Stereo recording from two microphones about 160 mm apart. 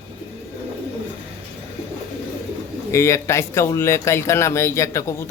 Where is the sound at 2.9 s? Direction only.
15° left (ahead or behind).